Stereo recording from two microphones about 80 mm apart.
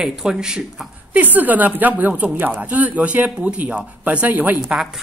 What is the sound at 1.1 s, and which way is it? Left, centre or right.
A woman's voice, right.